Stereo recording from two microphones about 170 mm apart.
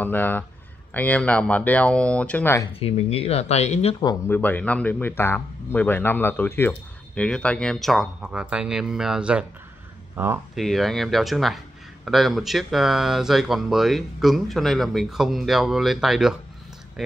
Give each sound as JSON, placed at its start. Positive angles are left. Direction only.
{"t": 0.0, "sound": "a man's voice", "side_deg": 10}
{"t": 2.8, "sound": "speech", "side_deg": 35}
{"t": 4.3, "sound": "a man's voice", "side_deg": 10}
{"t": 10.5, "sound": "speech", "side_deg": 0}